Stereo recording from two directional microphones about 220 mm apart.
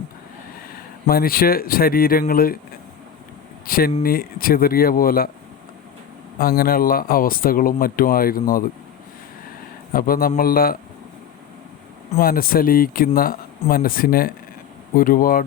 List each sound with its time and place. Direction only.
1.0 s speech: 40° left (ahead or behind)
3.7 s speech: 40° left (ahead or behind)
6.4 s speech: 40° left (ahead or behind)
9.9 s speech: 40° left (ahead or behind)
12.1 s speech: 40° left (ahead or behind)